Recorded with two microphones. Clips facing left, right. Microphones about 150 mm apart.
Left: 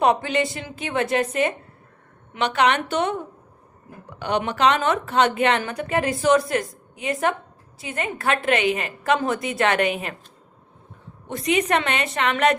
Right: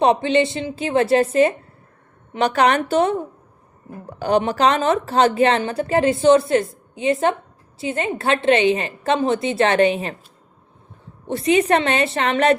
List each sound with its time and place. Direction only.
0.0 s a woman's voice: 25° right (ahead or behind)
11.3 s a woman's voice: 30° right (ahead or behind)